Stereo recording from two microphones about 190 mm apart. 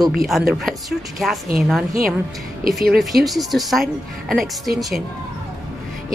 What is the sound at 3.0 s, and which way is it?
A woman's voice, centre (ahead or behind).